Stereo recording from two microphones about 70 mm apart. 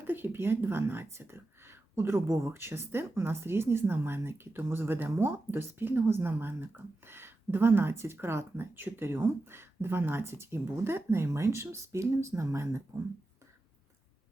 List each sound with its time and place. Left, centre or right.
0.0 s speech: right